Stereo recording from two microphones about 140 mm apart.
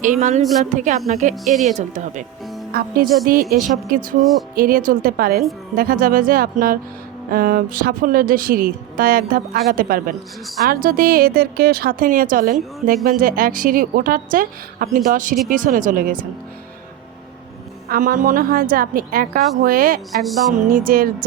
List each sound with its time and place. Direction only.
0.0 s a woman's voice: 60° right (ahead or behind)
2.7 s speech: 90° right
3.6 s speech: centre (ahead or behind)
4.5 s a woman's voice: 85° right
14.9 s speech: 75° right (ahead or behind)
17.8 s speech: 85° right